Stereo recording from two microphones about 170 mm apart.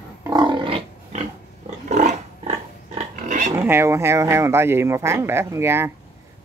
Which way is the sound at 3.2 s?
45° right (ahead or behind).